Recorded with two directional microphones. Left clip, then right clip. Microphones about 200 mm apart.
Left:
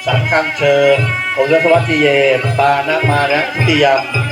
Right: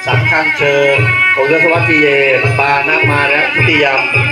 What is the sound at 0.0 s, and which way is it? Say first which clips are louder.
Speech: right 3 dB; 45° left (ahead or behind).